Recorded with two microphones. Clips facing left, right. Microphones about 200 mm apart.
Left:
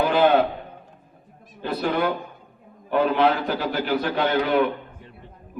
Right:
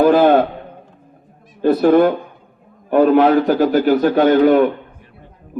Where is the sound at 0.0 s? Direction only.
45° right (ahead or behind).